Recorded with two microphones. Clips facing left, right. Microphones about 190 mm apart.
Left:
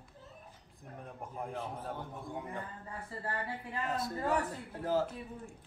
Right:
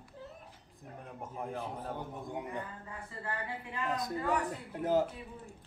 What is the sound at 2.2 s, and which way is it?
Speech, 20° right (ahead or behind).